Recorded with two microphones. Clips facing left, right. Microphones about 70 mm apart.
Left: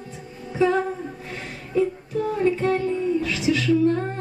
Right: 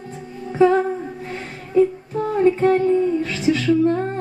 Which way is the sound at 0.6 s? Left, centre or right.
Right.